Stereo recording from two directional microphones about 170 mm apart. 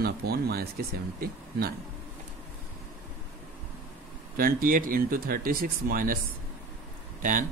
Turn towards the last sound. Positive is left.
turn(degrees=-50)  # may be behind; listen again after turning